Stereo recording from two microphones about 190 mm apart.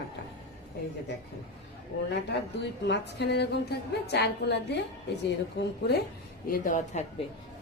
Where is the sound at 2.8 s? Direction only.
65° left (ahead or behind).